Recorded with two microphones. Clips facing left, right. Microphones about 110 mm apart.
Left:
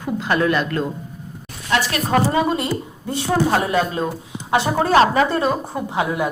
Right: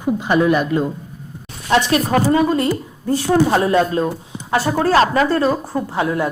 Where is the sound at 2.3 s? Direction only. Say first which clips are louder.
Right 3 dB; 20° left (ahead or behind).